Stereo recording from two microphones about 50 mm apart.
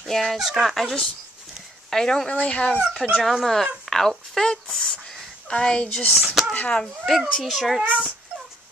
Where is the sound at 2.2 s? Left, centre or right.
Left.